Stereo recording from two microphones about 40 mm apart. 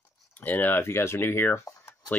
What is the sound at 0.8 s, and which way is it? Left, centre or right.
Speech, left.